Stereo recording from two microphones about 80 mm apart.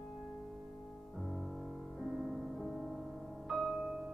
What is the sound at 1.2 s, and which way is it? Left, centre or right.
Music, centre.